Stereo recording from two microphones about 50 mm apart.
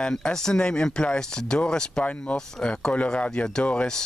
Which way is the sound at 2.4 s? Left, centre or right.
Centre.